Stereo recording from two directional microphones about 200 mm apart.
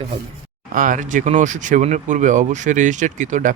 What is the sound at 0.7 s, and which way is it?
Speech, 40° right (ahead or behind).